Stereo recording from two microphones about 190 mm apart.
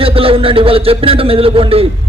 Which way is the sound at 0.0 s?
30° right (ahead or behind).